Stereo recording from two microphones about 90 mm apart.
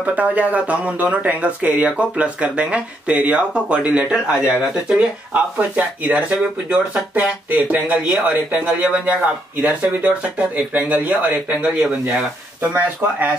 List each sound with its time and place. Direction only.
0.0 s speech: 15° right (ahead or behind)